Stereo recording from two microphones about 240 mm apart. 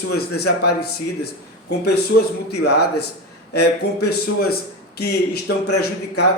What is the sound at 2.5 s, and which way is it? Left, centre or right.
Speech, left.